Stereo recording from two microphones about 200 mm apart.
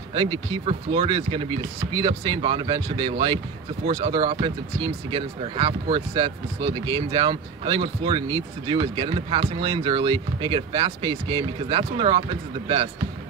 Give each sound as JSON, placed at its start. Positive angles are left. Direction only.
{"t": 0.1, "sound": "speech", "side_deg": -25}